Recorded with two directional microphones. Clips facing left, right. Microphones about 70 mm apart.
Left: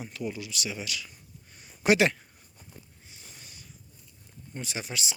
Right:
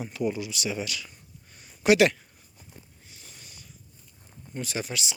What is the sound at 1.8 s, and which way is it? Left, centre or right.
Speech, left.